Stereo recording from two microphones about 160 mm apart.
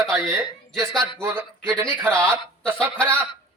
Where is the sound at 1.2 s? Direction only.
15° right (ahead or behind).